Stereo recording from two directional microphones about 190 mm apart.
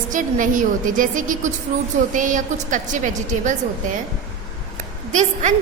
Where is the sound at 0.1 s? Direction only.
45° right (ahead or behind).